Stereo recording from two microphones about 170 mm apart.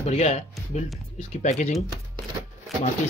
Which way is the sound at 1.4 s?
45° left (ahead or behind).